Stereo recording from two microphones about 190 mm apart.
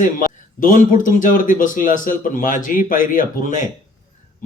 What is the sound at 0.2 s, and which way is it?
Speech, 45° left (ahead or behind).